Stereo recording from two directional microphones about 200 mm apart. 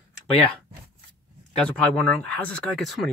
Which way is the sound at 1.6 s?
5° left (ahead or behind).